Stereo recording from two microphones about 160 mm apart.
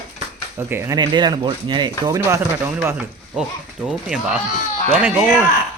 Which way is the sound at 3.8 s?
5° right (ahead or behind).